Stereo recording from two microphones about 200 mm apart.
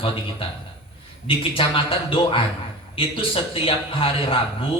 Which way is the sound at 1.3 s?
25° left (ahead or behind).